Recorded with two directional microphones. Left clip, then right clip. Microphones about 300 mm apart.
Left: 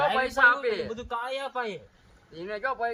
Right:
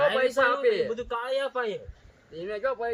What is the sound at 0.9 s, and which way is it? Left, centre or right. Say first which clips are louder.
Speech: right 3 dB; centre.